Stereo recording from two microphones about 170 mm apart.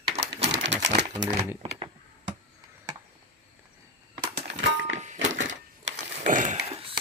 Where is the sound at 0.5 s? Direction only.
90° right.